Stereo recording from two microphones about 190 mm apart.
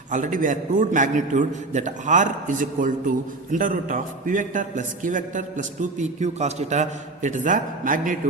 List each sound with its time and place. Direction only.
0.1 s a man's voice: 45° right (ahead or behind)